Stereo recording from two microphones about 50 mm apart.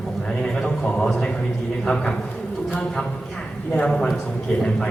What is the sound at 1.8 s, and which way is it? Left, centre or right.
Speech, centre.